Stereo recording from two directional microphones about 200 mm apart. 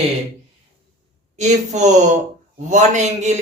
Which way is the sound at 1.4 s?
35° right (ahead or behind).